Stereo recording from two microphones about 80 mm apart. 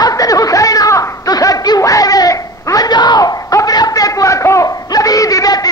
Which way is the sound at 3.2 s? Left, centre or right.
Left.